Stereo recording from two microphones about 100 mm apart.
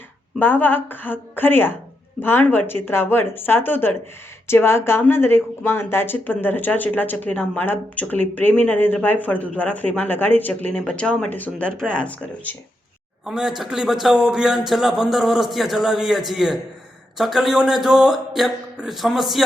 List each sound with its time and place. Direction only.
0.3 s speech: 20° left (ahead or behind)
13.2 s a man's voice: 5° right (ahead or behind)